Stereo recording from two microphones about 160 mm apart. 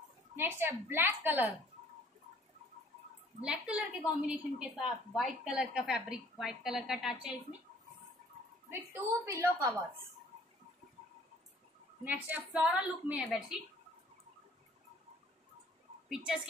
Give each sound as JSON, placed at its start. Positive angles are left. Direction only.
{"t": 0.4, "sound": "a woman's voice", "side_deg": -15}
{"t": 3.3, "sound": "a woman's voice", "side_deg": -5}
{"t": 8.6, "sound": "a woman's voice", "side_deg": -15}
{"t": 12.0, "sound": "a woman's voice", "side_deg": -10}
{"t": 16.1, "sound": "a woman's voice", "side_deg": -5}